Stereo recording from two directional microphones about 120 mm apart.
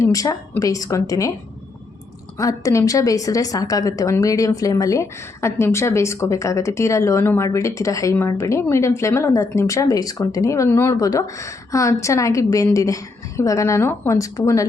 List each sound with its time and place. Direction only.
0.0 s a woman's voice: 30° left (ahead or behind)
2.4 s speech: 30° left (ahead or behind)